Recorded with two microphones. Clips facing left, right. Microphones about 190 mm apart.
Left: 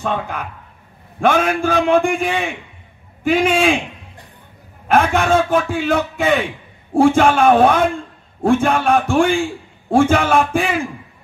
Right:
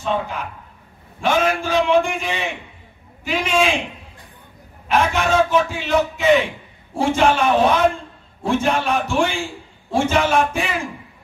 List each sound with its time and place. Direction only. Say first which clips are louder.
0.0 s a man's voice: left 1 dB; 55° left (ahead or behind)
4.8 s a man's voice: left 4 dB; 50° left (ahead or behind)